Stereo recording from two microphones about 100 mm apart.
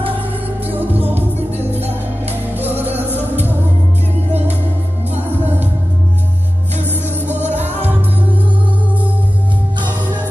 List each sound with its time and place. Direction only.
0.7 s music: 20° right (ahead or behind)
2.3 s music: 20° right (ahead or behind)
5.1 s music: 20° right (ahead or behind)
7.2 s music: 20° right (ahead or behind)